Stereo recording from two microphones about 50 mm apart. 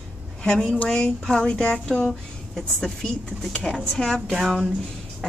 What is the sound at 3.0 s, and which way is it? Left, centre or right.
A woman's voice, centre.